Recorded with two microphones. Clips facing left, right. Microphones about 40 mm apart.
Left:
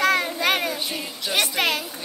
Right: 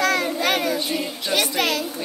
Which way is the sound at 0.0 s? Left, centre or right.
Left.